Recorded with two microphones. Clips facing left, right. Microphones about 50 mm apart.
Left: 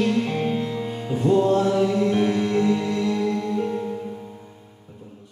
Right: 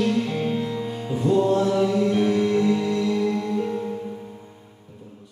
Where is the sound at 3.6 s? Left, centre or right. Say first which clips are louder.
Left 1 dB; centre.